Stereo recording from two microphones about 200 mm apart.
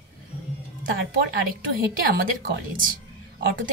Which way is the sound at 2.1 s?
45° right (ahead or behind).